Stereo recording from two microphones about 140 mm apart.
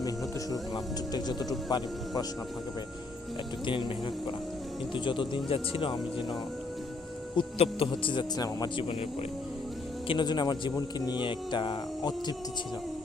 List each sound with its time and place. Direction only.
0.5 s speech: 30° left (ahead or behind)
3.7 s speech: 35° left (ahead or behind)
7.3 s speech: 40° left (ahead or behind)
10.1 s speech: 35° left (ahead or behind)